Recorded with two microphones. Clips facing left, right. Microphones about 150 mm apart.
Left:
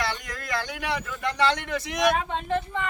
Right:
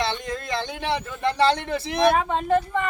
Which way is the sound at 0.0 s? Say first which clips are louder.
Right 4 dB; 25° right (ahead or behind).